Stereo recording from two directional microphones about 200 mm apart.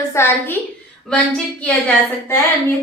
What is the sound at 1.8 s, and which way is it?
Speech, 10° left (ahead or behind).